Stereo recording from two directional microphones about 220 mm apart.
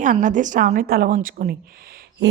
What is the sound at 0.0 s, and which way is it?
A woman's voice, 35° right (ahead or behind).